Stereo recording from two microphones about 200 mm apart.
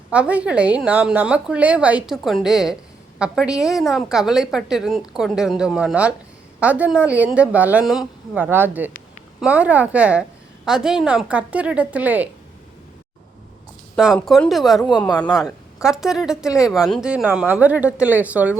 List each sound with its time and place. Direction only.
0.1 s a woman's voice: 5° right (ahead or behind)
13.9 s speech: centre (ahead or behind)
14.8 s speech: 20° left (ahead or behind)
15.2 s speech: centre (ahead or behind)